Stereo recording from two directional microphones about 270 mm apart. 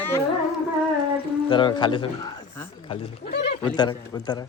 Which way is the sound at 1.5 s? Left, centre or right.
Centre.